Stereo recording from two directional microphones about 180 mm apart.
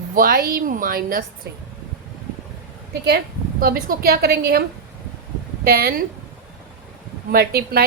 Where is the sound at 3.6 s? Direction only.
55° right (ahead or behind).